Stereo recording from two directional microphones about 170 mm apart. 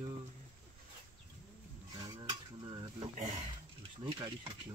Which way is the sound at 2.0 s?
25° right (ahead or behind).